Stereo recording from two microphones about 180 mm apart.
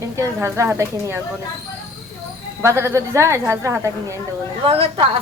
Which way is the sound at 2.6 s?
15° right (ahead or behind).